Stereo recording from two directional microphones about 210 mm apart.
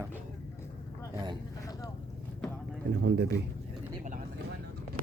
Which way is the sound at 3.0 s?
60° right (ahead or behind).